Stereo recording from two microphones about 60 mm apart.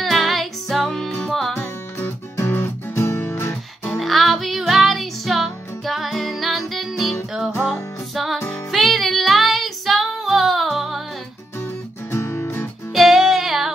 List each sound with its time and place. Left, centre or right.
0.0 s music: centre
2.5 s music: left
4.0 s music: centre
8.7 s female singing: centre
12.1 s music: left
12.9 s music: centre